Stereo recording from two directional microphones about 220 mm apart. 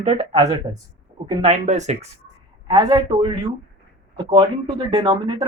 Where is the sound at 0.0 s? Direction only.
30° right (ahead or behind).